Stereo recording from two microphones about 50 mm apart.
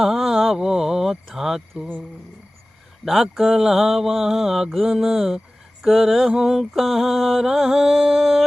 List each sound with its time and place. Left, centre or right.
0.0 s speech: centre
1.8 s speech: right
3.0 s mantra: centre